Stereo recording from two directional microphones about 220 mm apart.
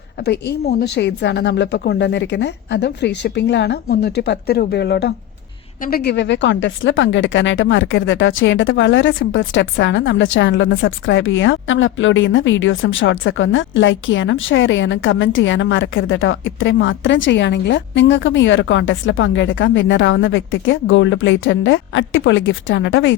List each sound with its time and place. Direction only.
0.3 s a woman's voice: 45° left (ahead or behind)